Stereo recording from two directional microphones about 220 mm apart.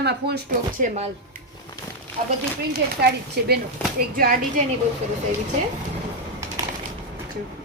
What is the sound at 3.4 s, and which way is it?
A woman's voice, 45° right (ahead or behind).